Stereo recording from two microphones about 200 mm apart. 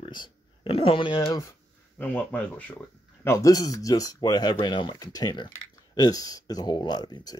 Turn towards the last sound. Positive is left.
turn(degrees=20)  # may be behind; listen again after turning